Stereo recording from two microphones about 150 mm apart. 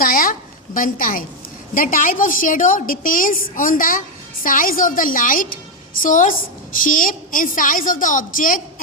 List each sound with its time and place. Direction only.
0.0 s a woman's voice: 70° left (ahead or behind)